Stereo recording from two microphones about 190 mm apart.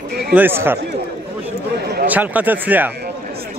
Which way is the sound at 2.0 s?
10° right (ahead or behind).